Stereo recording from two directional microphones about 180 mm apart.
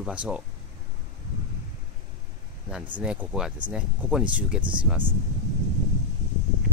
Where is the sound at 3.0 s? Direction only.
5° right (ahead or behind).